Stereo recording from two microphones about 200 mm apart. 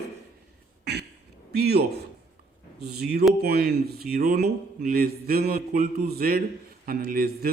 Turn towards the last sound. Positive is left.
turn(degrees=-50)  # may be behind; listen again after turning